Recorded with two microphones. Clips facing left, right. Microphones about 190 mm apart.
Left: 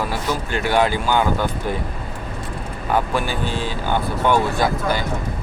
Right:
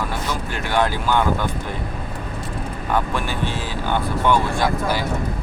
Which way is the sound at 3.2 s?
Centre (ahead or behind).